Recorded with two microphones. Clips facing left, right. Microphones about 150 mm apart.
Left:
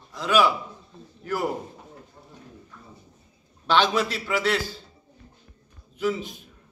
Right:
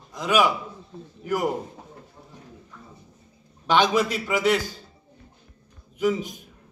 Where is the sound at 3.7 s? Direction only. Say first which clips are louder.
Right 2 dB; 15° right (ahead or behind).